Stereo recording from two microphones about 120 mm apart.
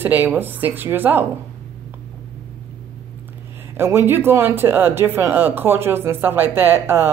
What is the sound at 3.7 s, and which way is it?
A woman's voice, 20° right (ahead or behind).